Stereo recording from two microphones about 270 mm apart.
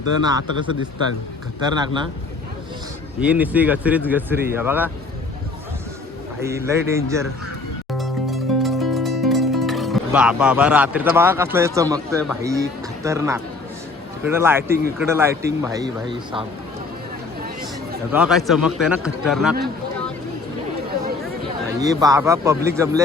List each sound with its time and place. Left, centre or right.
0.2 s a man's voice: centre
1.6 s a man's voice: centre
3.2 s a man's voice: centre
6.4 s a man's voice: centre
7.9 s music: centre
14.3 s a man's voice: centre
17.4 s a sound: right
18.1 s a man's voice: centre
21.8 s a man's voice: centre